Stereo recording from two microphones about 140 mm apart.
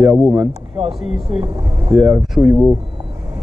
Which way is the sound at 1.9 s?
5° right (ahead or behind).